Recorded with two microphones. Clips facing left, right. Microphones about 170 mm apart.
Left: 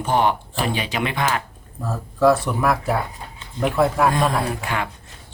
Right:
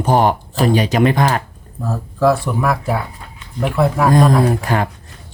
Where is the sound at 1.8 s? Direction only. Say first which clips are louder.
Right 2 dB; centre (ahead or behind).